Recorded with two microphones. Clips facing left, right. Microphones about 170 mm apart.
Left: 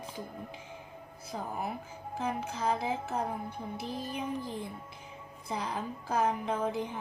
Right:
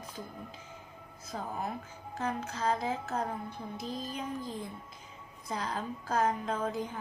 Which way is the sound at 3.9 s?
60° left (ahead or behind).